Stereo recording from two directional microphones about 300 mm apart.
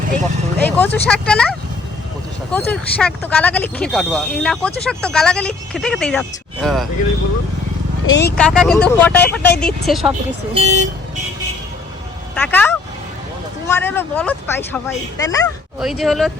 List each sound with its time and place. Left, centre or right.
0.6 s speech: centre
8.0 s speech: left
8.4 s speech: centre
10.5 s speech: right
12.3 s speech: centre
15.8 s speech: centre